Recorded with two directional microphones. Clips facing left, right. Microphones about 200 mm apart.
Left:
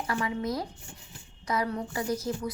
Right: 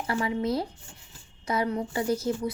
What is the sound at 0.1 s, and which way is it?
A woman's voice, 25° right (ahead or behind).